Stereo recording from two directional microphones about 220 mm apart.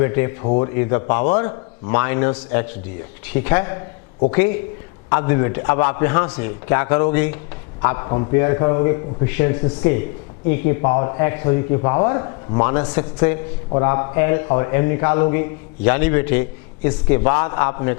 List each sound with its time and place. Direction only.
0.0 s a man's voice: 15° left (ahead or behind)